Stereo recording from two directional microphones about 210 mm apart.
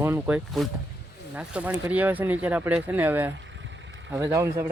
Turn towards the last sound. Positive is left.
turn(degrees=-15)  # may be behind; listen again after turning